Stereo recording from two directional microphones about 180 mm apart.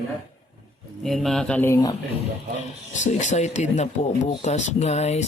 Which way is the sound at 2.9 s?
40° left (ahead or behind).